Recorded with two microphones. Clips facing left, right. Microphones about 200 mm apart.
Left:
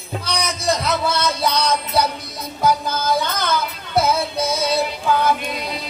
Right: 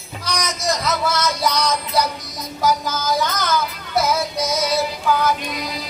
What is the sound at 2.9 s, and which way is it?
Speech, 60° left (ahead or behind).